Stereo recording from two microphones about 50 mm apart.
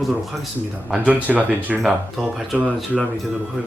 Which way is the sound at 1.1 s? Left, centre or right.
Right.